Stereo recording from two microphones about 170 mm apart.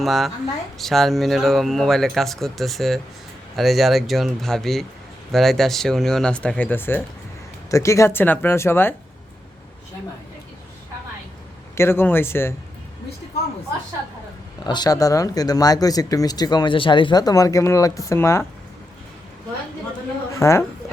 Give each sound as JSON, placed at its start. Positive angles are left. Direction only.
{"t": 0.0, "sound": "speech", "side_deg": 0}
{"t": 11.7, "sound": "speech", "side_deg": 15}
{"t": 14.6, "sound": "speech", "side_deg": 25}
{"t": 20.3, "sound": "a woman's voice", "side_deg": 15}